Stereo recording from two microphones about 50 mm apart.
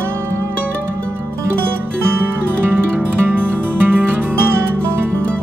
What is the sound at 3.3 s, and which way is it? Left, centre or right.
Music, right.